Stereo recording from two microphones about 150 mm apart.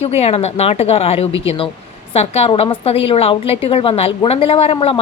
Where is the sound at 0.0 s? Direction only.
45° left (ahead or behind).